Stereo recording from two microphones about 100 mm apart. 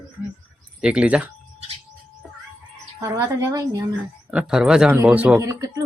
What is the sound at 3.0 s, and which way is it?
Speech, 35° right (ahead or behind).